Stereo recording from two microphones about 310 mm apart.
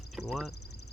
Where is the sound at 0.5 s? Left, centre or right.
Left.